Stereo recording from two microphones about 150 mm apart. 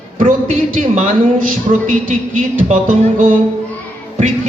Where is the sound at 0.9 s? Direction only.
55° right (ahead or behind).